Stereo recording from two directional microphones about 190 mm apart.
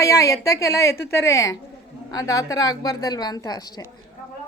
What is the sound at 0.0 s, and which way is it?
A woman's voice, 15° left (ahead or behind).